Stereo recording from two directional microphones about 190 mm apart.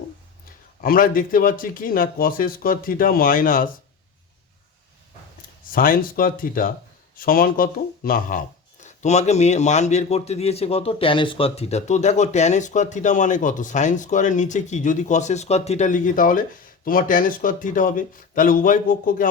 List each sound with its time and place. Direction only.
0.8 s speech: 45° left (ahead or behind)
5.7 s a man's voice: 50° left (ahead or behind)